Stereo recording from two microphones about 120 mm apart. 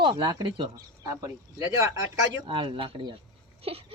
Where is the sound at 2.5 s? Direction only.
45° right (ahead or behind).